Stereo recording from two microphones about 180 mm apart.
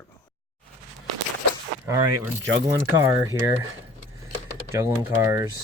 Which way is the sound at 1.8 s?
15° right (ahead or behind).